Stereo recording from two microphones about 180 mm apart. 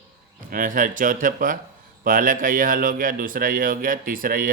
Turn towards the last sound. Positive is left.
turn(degrees=-50)  # may be behind; listen again after turning